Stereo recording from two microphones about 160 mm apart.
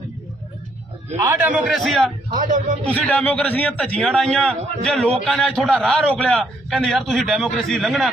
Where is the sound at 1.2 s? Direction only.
15° right (ahead or behind); by 2.0 s centre (ahead or behind).